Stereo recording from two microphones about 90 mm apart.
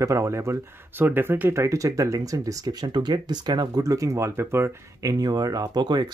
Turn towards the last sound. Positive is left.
turn(degrees=-55)  # may be behind; listen again after turning